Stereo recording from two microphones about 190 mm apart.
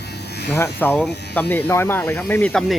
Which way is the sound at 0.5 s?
10° left (ahead or behind).